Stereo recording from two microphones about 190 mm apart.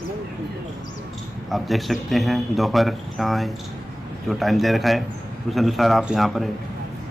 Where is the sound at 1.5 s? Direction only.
Centre (ahead or behind).